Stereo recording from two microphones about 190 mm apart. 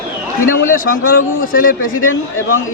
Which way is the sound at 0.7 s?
45° left (ahead or behind).